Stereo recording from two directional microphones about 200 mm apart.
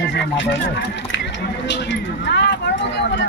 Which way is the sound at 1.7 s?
60° left (ahead or behind).